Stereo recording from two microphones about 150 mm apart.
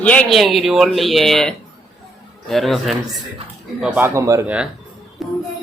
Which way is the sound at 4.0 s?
20° right (ahead or behind).